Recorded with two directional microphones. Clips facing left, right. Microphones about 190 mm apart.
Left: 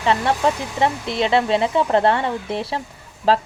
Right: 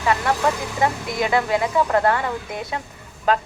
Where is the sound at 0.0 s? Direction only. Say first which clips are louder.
Left 2 dB; 25° left (ahead or behind).